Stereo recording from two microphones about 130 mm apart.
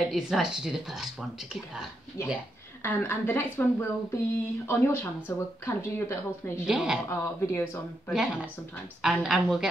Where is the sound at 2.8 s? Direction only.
15° left (ahead or behind).